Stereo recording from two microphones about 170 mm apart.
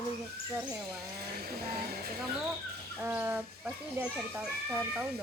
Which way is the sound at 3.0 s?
10° right (ahead or behind).